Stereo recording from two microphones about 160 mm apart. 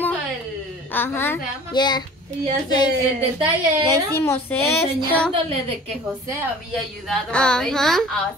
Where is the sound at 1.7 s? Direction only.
25° left (ahead or behind).